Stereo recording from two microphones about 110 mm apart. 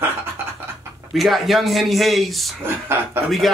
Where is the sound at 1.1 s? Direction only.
Centre (ahead or behind).